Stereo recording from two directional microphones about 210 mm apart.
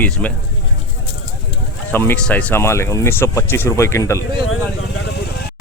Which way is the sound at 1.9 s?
10° left (ahead or behind).